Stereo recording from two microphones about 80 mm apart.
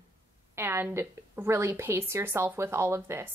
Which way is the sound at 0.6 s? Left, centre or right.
Right.